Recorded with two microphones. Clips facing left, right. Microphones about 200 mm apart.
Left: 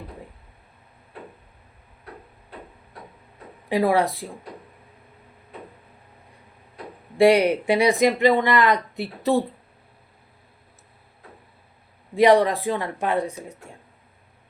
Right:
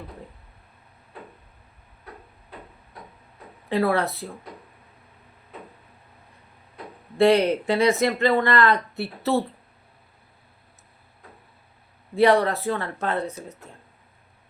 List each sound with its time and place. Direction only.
3.7 s speech: 15° left (ahead or behind)
7.2 s speech: 15° left (ahead or behind)
12.1 s speech: 15° left (ahead or behind)